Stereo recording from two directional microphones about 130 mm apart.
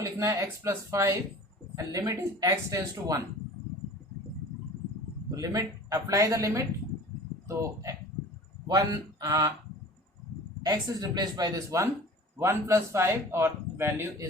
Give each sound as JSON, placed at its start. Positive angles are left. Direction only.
{"t": 0.0, "sound": "a man's voice", "side_deg": -25}
{"t": 5.4, "sound": "a man's voice", "side_deg": -25}
{"t": 9.2, "sound": "a man's voice", "side_deg": -30}
{"t": 10.6, "sound": "a man's voice", "side_deg": -30}